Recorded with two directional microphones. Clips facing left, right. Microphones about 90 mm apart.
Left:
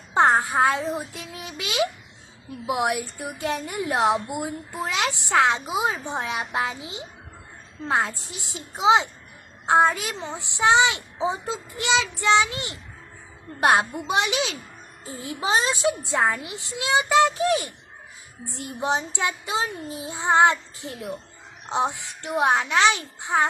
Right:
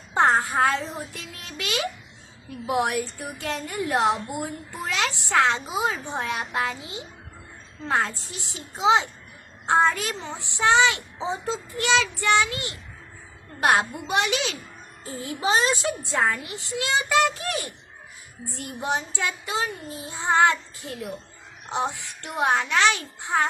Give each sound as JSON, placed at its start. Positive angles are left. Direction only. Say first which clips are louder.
{"t": 0.1, "sound": "child singing", "louder": "left 1 dB", "side_deg": 20}
{"t": 7.9, "sound": "a woman's voice", "louder": "left 1 dB", "side_deg": 20}
{"t": 8.2, "sound": "child singing", "louder": "left 1 dB", "side_deg": 20}
{"t": 9.6, "sound": "a woman's voice", "louder": "left 2 dB", "side_deg": 15}
{"t": 13.6, "sound": "child singing", "louder": "left 2 dB", "side_deg": 20}